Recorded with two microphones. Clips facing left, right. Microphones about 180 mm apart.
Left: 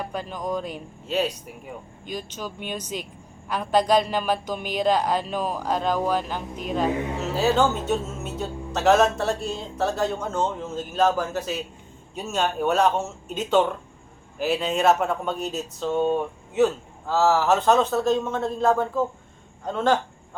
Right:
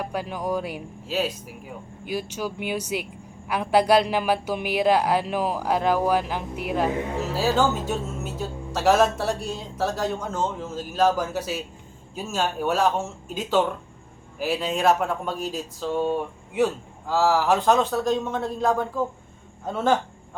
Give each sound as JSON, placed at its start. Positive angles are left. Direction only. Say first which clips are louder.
{"t": 0.0, "sound": "speech", "louder": "right 2 dB", "side_deg": -10}
{"t": 17.2, "sound": "speech", "louder": "left 1 dB", "side_deg": -10}
{"t": 17.7, "sound": "speech", "louder": "left 2 dB", "side_deg": 0}
{"t": 18.0, "sound": "speech", "louder": "left 1 dB", "side_deg": -10}